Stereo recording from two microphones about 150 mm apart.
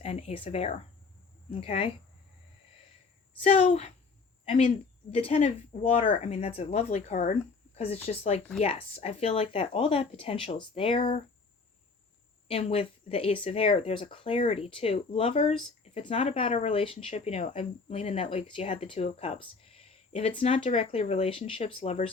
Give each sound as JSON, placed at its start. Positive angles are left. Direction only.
{"t": 0.0, "sound": "a woman's voice", "side_deg": 45}
{"t": 3.4, "sound": "a woman's voice", "side_deg": 45}
{"t": 4.4, "sound": "cricket", "side_deg": 50}
{"t": 5.1, "sound": "a woman's voice", "side_deg": 40}
{"t": 6.1, "sound": "a woman's voice", "side_deg": 40}
{"t": 12.5, "sound": "speech", "side_deg": 40}